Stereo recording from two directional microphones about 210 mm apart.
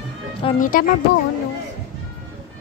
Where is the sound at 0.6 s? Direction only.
40° left (ahead or behind).